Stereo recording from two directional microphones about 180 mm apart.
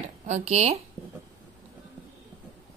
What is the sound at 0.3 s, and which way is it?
Speech, 35° right (ahead or behind).